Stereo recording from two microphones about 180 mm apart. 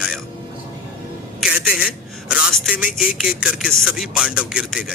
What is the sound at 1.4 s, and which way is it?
A man's voice, 5° right (ahead or behind).